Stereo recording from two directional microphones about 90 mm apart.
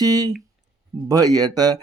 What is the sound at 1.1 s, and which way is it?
Mantra, 45° right (ahead or behind).